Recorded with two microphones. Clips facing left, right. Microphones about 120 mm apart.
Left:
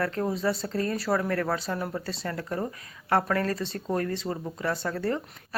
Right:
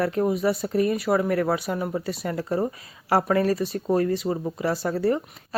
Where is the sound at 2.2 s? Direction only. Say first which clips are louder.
Right 6 dB; 20° right (ahead or behind).